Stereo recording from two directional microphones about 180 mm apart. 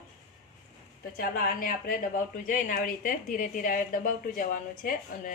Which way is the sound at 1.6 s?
50° left (ahead or behind).